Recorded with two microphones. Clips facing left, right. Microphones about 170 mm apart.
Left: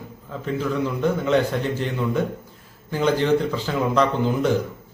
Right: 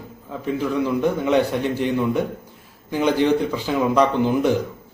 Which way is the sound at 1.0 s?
15° right (ahead or behind).